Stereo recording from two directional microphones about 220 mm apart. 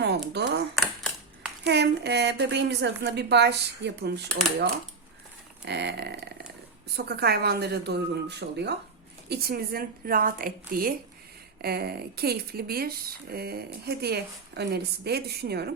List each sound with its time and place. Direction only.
0.0 s a sound: 50° right (ahead or behind)
1.6 s speech: 50° right (ahead or behind)
5.6 s a woman's voice: 50° right (ahead or behind)